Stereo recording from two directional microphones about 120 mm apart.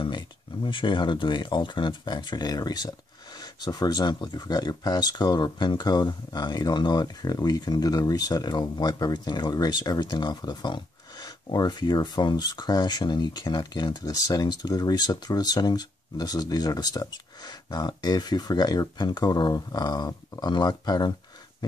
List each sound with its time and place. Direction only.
0.7 s speech: 45° left (ahead or behind)